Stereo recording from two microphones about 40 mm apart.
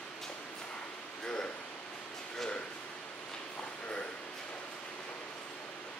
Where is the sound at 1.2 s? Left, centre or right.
Centre.